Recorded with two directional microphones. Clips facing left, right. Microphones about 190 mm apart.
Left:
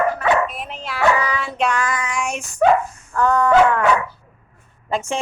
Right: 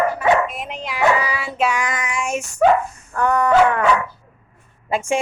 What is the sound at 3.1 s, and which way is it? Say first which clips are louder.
Speech: left 1 dB; 15° right (ahead or behind).